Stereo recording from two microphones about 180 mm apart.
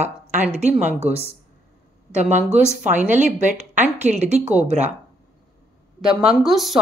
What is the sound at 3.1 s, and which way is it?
Speech, 45° right (ahead or behind).